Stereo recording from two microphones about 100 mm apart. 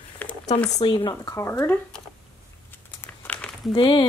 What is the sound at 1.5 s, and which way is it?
Speech, 20° left (ahead or behind).